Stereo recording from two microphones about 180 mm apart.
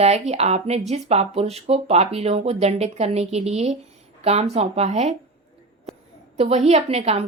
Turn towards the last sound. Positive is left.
turn(degrees=-35)  # may be behind; listen again after turning